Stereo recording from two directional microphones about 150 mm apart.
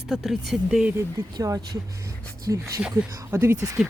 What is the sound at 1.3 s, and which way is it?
Speech, 25° right (ahead or behind).